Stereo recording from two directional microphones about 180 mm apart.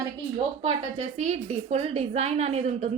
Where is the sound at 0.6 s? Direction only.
35° right (ahead or behind).